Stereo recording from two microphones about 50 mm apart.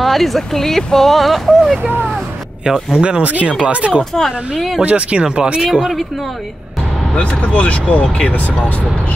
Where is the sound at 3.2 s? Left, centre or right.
Right.